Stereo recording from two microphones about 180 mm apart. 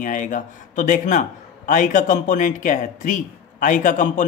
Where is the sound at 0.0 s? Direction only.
45° left (ahead or behind).